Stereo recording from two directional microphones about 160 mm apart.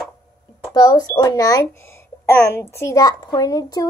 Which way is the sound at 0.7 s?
20° left (ahead or behind).